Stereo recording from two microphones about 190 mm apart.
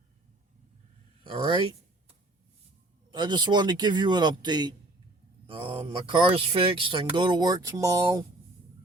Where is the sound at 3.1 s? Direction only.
25° right (ahead or behind).